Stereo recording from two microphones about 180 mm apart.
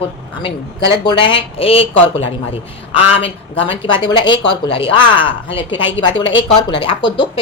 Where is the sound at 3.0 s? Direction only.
30° left (ahead or behind).